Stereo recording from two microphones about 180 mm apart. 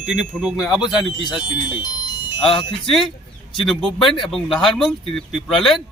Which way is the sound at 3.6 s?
Centre (ahead or behind).